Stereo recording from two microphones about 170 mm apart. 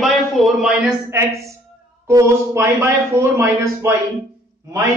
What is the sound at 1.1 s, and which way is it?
A man's voice, 15° right (ahead or behind).